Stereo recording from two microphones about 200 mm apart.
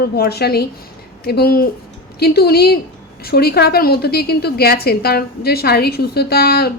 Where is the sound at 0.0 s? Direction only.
50° left (ahead or behind).